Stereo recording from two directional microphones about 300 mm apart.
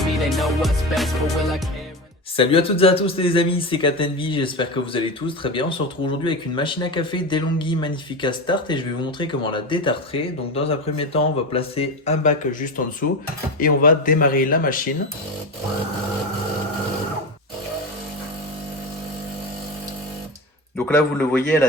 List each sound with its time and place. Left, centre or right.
0.0 s music: centre
2.3 s speech: centre
13.6 s a man's voice: left
20.7 s a man's voice: centre